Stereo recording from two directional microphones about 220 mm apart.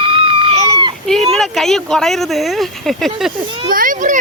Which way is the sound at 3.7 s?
40° right (ahead or behind).